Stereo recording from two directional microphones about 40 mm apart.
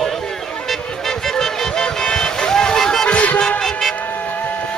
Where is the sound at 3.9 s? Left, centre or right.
Left.